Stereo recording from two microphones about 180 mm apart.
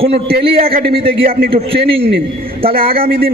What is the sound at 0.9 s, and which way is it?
Speech, 55° right (ahead or behind).